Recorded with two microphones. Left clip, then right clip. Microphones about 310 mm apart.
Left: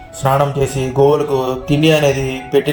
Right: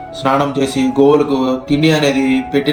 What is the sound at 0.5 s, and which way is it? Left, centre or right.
A man's voice, left.